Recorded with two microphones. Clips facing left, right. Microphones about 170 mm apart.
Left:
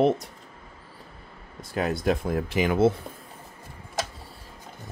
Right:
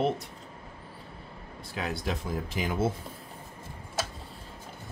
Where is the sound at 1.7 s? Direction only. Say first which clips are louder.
Left 8 dB; 50° left (ahead or behind); by 2.9 s 70° left (ahead or behind).